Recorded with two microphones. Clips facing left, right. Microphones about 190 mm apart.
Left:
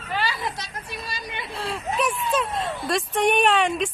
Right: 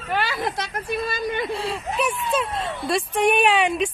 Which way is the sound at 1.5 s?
Centre (ahead or behind).